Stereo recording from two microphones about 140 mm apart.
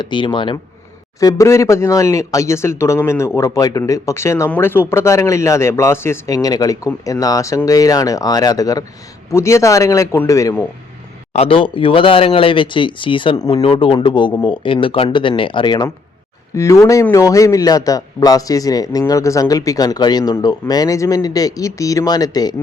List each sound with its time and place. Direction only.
0.0 s speech: 35° left (ahead or behind)
1.2 s speech: 25° left (ahead or behind)
11.3 s speech: 40° left (ahead or behind)
16.6 s speech: 20° left (ahead or behind)